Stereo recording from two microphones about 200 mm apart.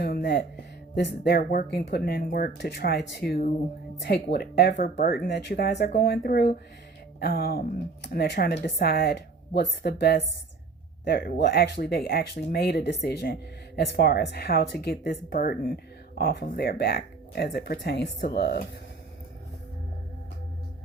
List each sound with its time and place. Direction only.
0.0 s speech: 50° left (ahead or behind)
4.9 s speech: 50° left (ahead or behind)